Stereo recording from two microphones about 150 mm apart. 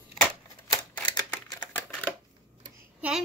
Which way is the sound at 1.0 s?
10° left (ahead or behind).